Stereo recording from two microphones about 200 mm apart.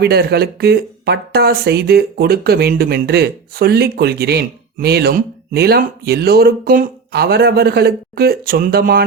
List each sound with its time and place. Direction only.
0.0 s a woman's voice: 55° right (ahead or behind)